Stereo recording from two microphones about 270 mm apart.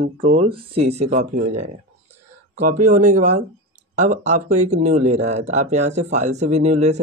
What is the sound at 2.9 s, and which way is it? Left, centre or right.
Speech, right.